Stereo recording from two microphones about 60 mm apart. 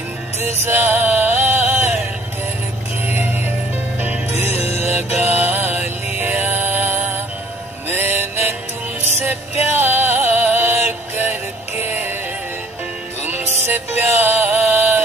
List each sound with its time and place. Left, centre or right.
0.4 s music: right
4.3 s music: right
11.8 s synthetic singing: right
13.2 s music: right